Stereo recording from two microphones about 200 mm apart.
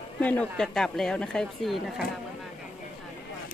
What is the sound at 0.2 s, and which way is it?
Speech, 5° left (ahead or behind).